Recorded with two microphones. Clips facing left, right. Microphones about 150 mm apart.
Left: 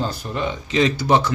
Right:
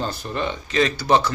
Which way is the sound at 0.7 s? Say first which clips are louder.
Left 1 dB; 20° left (ahead or behind).